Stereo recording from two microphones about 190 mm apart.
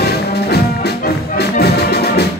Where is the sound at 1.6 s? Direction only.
60° left (ahead or behind).